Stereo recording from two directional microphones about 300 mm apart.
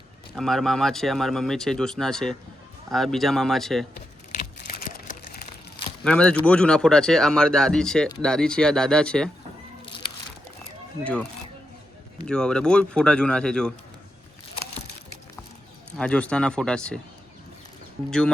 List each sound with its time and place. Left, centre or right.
0.3 s speech: centre
4.3 s a sound: left
6.1 s speech: centre
11.0 s speech: centre
16.0 s speech: centre